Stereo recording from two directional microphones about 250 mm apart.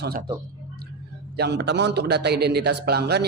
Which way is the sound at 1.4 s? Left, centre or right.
Right.